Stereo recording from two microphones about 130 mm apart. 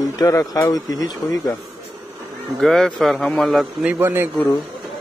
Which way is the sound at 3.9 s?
15° right (ahead or behind).